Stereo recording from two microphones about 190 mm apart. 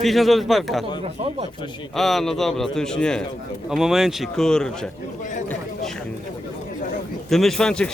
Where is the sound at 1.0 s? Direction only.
30° right (ahead or behind).